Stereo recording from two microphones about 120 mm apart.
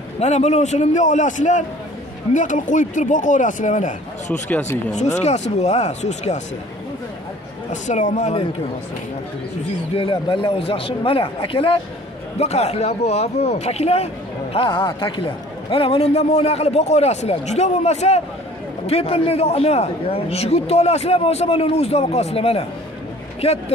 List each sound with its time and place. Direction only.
0.2 s a man's voice: 70° left (ahead or behind); by 3.9 s 90° left
4.3 s speech: 15° left (ahead or behind)
5.2 s speech: 70° left (ahead or behind)
7.7 s a man's voice: 90° left; by 8.5 s 65° left (ahead or behind)
9.9 s a man's voice: 45° left (ahead or behind)
12.4 s speech: 60° left (ahead or behind)